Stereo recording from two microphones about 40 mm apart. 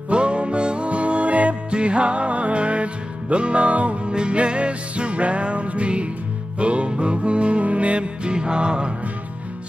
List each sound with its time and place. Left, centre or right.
0.1 s music: right